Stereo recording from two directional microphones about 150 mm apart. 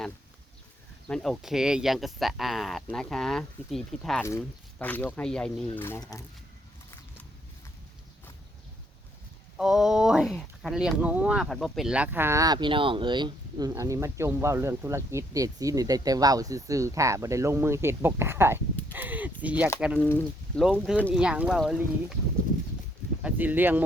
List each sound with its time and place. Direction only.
1.0 s speech: 5° left (ahead or behind)
4.2 s speech: 15° left (ahead or behind)
9.6 s speech: 5° right (ahead or behind)
20.0 s speech: 10° left (ahead or behind)
20.7 s speech: 5° right (ahead or behind)
23.2 s speech: 10° right (ahead or behind)